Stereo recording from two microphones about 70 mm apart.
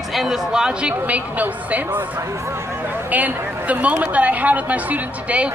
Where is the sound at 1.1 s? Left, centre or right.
Right.